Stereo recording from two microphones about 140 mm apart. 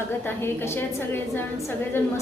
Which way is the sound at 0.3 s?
15° left (ahead or behind).